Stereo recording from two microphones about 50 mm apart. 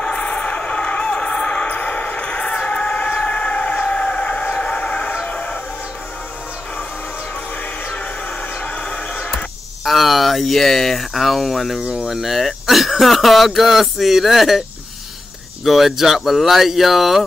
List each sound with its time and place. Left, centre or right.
0.0 s a sound: left
3.2 s train: left
5.2 s music: left
8.5 s music: left
9.8 s speech: centre
11.8 s speech: right
12.1 s speech: centre
15.6 s speech: centre